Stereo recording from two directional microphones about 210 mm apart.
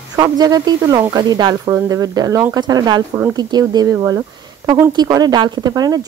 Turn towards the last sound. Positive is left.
turn(degrees=-20)  # may be behind; listen again after turning